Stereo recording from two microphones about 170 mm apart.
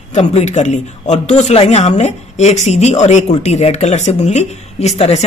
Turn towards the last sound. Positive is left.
turn(degrees=40)  # may be behind; listen again after turning